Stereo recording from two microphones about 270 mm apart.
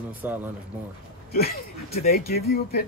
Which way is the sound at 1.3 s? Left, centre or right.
Left.